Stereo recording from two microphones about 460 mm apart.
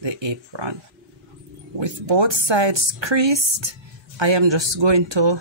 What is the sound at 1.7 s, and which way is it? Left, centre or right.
Speech, right.